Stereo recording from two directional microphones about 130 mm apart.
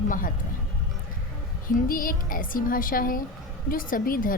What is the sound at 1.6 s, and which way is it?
A woman's voice, 90° left.